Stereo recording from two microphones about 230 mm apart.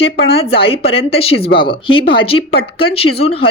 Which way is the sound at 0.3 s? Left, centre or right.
Left.